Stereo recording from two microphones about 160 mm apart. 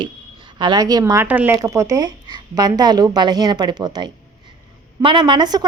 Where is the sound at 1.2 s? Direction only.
10° right (ahead or behind).